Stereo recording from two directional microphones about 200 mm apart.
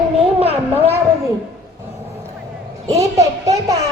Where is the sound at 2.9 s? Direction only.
15° right (ahead or behind).